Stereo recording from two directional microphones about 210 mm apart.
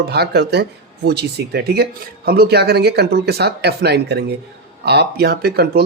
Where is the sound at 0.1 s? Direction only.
50° right (ahead or behind).